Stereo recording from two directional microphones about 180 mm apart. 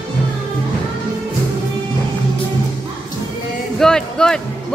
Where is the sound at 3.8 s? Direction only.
5° left (ahead or behind).